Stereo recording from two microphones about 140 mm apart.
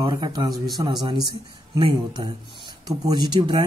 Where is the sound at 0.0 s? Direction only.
30° right (ahead or behind).